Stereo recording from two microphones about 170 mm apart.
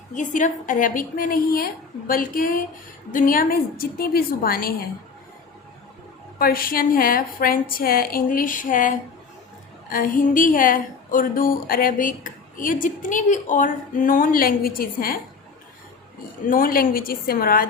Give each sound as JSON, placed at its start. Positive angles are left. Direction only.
{"t": 0.1, "sound": "a woman's voice", "side_deg": 45}
{"t": 6.4, "sound": "a woman's voice", "side_deg": 60}
{"t": 16.5, "sound": "a woman's voice", "side_deg": 55}